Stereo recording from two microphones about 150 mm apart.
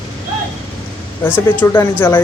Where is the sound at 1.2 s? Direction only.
15° left (ahead or behind).